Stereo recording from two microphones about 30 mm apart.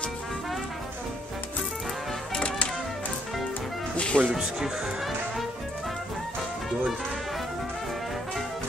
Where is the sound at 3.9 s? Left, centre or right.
Left.